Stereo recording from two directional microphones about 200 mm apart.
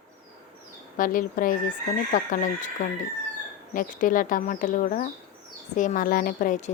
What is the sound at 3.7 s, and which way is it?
Speech, 40° left (ahead or behind).